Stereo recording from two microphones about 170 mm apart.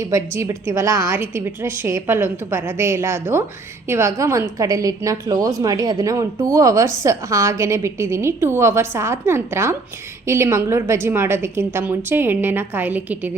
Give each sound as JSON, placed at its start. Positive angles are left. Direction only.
{"t": 0.1, "sound": "a woman's voice", "side_deg": -15}